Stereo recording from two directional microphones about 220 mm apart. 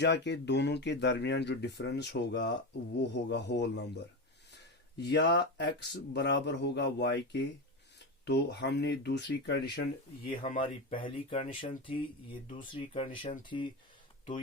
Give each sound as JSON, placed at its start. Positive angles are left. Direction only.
{"t": 0.0, "sound": "speech", "side_deg": 50}
{"t": 4.5, "sound": "a sound", "side_deg": 50}
{"t": 5.5, "sound": "speech", "side_deg": 50}
{"t": 10.2, "sound": "speech", "side_deg": 35}
{"t": 10.6, "sound": "speech", "side_deg": 25}
{"t": 13.1, "sound": "speech", "side_deg": 35}
{"t": 13.5, "sound": "speech", "side_deg": 20}